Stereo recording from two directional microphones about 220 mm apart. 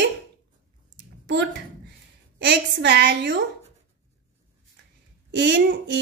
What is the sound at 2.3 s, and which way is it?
A woman's voice, 50° right (ahead or behind).